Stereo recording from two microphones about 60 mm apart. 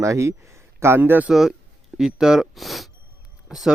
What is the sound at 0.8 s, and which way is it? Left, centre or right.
Speech, right.